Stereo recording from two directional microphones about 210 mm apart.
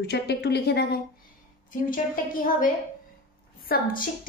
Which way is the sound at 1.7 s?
40° left (ahead or behind).